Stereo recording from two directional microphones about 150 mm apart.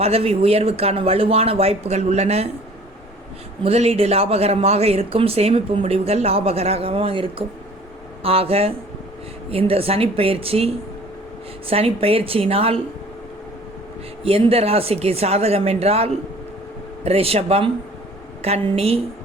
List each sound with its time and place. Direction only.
0.0 s speech: 40° right (ahead or behind)
3.6 s speech: 45° right (ahead or behind)
14.3 s speech: 40° right (ahead or behind)